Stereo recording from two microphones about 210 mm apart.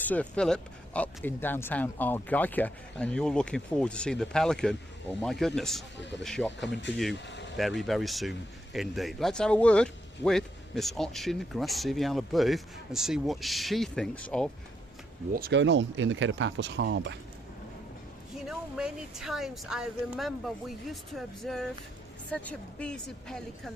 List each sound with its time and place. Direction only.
0.0 s speech: 5° left (ahead or behind)
7.3 s vehicle: 60° left (ahead or behind)
7.8 s speech: centre (ahead or behind)
15.3 s speech: 45° right (ahead or behind)
18.4 s speech: centre (ahead or behind)